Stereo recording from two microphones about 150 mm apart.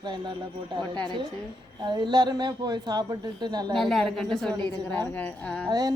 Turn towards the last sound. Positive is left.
turn(degrees=-25)  # may be behind; listen again after turning